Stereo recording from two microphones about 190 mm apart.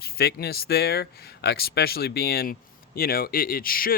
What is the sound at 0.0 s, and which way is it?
Speech, 55° left (ahead or behind).